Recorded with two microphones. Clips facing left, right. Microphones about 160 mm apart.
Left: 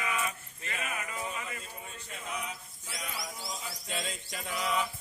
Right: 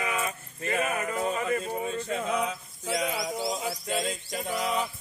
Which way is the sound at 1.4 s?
60° right (ahead or behind).